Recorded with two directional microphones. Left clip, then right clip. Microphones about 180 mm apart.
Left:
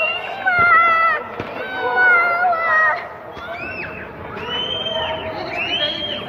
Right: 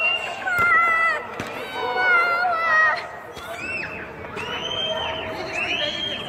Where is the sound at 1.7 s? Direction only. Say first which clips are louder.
Left 5 dB; 40° left (ahead or behind).